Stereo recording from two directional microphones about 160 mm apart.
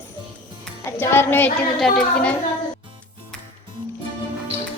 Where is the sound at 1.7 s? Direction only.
Centre (ahead or behind).